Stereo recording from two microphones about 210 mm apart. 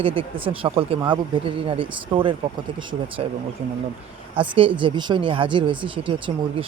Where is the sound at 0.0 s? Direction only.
25° right (ahead or behind).